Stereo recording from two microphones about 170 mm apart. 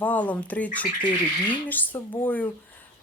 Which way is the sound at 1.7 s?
10° left (ahead or behind).